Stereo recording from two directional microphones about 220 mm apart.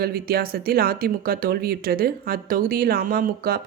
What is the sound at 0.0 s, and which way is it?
Speech, 45° right (ahead or behind).